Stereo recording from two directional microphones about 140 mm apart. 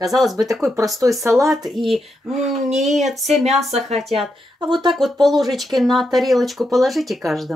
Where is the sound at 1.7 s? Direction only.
Centre (ahead or behind).